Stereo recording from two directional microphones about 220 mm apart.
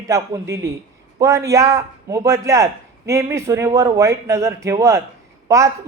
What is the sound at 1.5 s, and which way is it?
Speech, 15° right (ahead or behind).